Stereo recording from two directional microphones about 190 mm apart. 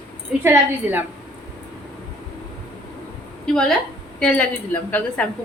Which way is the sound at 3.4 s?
Centre (ahead or behind).